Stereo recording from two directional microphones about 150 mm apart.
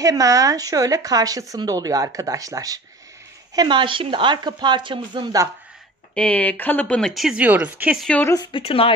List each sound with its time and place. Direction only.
0.0 s speech: 20° right (ahead or behind)
6.1 s speech: 10° left (ahead or behind); by 8.0 s 10° right (ahead or behind)
8.0 s speech: 10° left (ahead or behind)
8.3 s speech: 30° left (ahead or behind)